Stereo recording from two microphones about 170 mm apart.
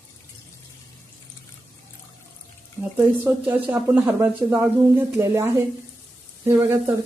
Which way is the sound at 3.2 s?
10° right (ahead or behind).